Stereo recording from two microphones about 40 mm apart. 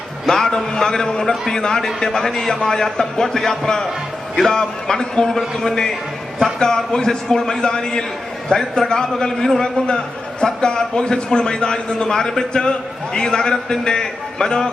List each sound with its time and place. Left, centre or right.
0.3 s a man's voice: centre